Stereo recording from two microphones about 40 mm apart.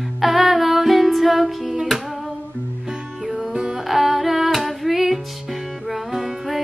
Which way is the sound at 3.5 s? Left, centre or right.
Right.